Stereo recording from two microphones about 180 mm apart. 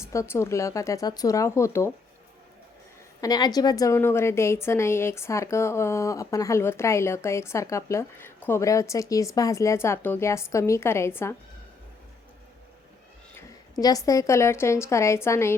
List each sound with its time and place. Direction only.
0.1 s a woman's voice: 15° left (ahead or behind)
3.2 s a woman's voice: 20° left (ahead or behind)
13.7 s a woman's voice: 20° left (ahead or behind)